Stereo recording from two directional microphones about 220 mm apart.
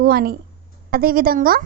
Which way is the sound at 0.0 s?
45° right (ahead or behind).